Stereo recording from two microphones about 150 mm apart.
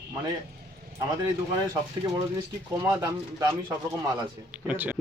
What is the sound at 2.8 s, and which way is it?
Speech, 25° right (ahead or behind).